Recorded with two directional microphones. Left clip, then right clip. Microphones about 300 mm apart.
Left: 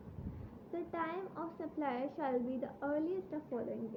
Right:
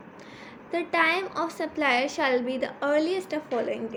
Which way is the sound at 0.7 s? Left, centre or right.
Centre.